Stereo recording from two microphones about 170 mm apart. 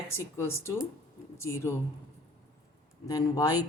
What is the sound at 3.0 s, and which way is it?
Speech, 20° left (ahead or behind).